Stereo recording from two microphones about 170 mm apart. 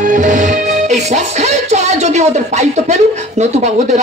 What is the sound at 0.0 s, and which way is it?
Music, 45° right (ahead or behind).